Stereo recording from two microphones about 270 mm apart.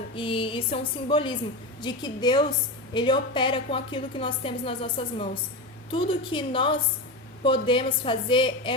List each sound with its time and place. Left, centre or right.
0.2 s a woman's voice: centre